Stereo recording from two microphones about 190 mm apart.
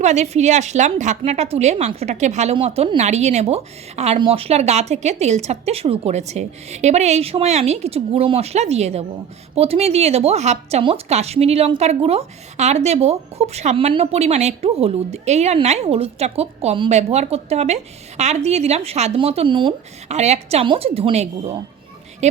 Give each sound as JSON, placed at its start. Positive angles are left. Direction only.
{"t": 0.0, "sound": "a woman's voice", "side_deg": -40}